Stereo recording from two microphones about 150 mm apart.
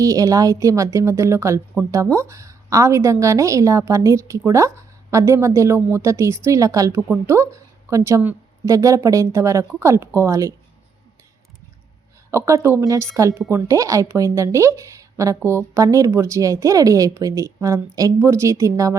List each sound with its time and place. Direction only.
0.0 s speech: 20° right (ahead or behind)
12.3 s speech: 20° right (ahead or behind)